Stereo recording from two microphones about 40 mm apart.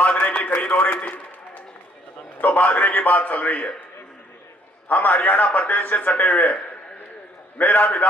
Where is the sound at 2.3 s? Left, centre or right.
Left.